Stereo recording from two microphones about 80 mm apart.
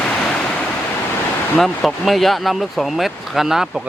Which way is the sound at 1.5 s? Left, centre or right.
Centre.